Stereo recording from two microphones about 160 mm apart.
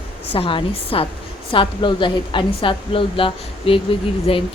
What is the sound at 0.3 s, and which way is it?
Speech, 35° left (ahead or behind).